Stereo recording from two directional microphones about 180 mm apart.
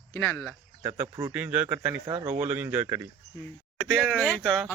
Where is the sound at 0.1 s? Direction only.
15° left (ahead or behind).